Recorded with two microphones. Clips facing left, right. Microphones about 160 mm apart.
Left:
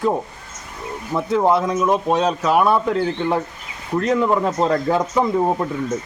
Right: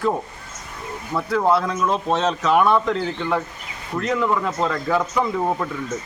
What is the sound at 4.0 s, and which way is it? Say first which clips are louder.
Speech: left 4 dB; 30° left (ahead or behind).